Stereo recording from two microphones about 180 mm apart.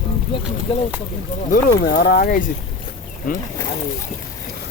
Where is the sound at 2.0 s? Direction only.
55° left (ahead or behind).